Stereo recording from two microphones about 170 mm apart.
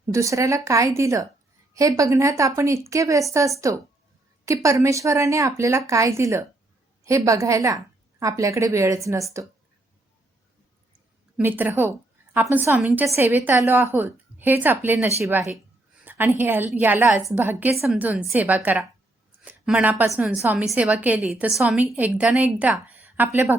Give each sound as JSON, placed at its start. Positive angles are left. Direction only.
{"t": 0.1, "sound": "a woman's voice", "side_deg": -20}
{"t": 11.3, "sound": "a woman's voice", "side_deg": -10}